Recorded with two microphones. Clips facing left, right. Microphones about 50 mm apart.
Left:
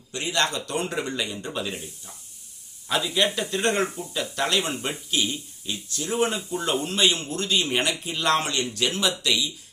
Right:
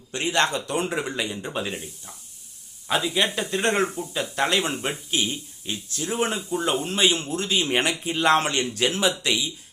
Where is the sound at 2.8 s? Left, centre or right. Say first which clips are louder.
Even; right.